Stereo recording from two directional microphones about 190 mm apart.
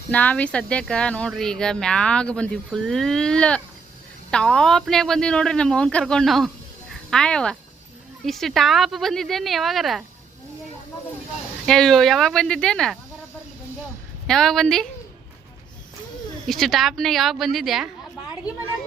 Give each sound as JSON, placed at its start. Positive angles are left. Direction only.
{"t": 0.1, "sound": "speech", "side_deg": 5}
{"t": 11.6, "sound": "speech", "side_deg": 5}
{"t": 14.3, "sound": "speech", "side_deg": 0}
{"t": 16.5, "sound": "speech", "side_deg": 0}